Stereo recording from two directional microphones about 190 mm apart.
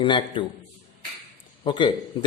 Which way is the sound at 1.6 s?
25° left (ahead or behind).